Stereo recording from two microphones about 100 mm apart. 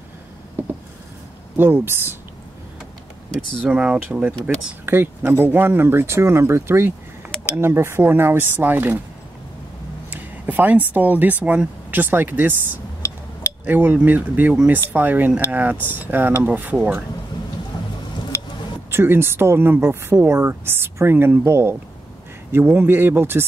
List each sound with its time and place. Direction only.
1.6 s speech: 20° right (ahead or behind)
3.6 s speech: 10° right (ahead or behind)
10.1 s speech: 20° right (ahead or behind)
18.9 s speech: 25° right (ahead or behind)